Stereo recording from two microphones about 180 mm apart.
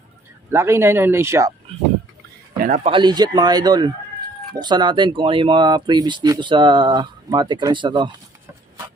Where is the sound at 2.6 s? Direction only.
50° right (ahead or behind).